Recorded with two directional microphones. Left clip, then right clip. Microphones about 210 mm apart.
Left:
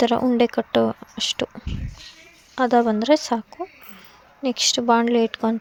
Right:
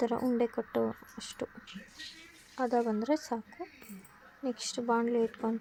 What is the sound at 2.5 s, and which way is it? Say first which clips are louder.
Speech: left 12 dB; 40° left (ahead or behind).